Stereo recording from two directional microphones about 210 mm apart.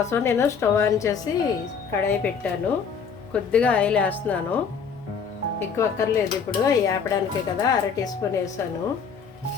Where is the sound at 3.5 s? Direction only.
5° left (ahead or behind).